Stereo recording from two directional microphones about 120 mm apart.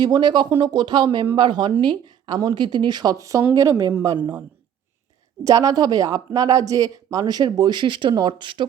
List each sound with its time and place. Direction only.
0.0 s a woman's voice: 35° right (ahead or behind)
5.4 s speech: 30° right (ahead or behind)